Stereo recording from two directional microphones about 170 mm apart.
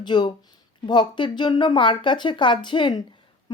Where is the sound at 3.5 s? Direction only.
25° left (ahead or behind).